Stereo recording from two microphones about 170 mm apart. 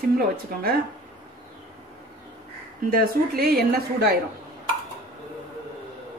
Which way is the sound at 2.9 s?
65° right (ahead or behind).